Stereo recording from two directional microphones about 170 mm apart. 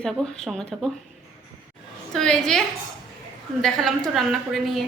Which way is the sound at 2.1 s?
5° left (ahead or behind).